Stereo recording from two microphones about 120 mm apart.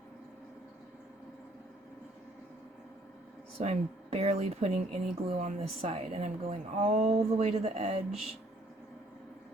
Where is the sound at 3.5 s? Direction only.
60° right (ahead or behind).